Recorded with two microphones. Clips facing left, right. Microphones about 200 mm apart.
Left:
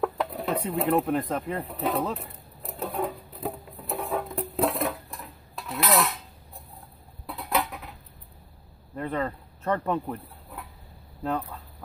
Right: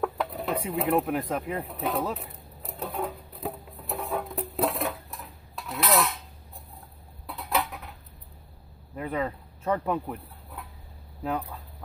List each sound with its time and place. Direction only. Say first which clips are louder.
0.0 s speech: left 1 dB; centre (ahead or behind)
1.7 s music: left 2 dB; centre (ahead or behind)
7.2 s dishes: left 1 dB; centre (ahead or behind)
8.9 s chicken: left 1 dB; 5° right (ahead or behind)